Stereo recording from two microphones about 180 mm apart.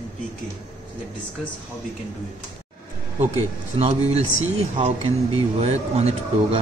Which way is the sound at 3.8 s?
35° right (ahead or behind).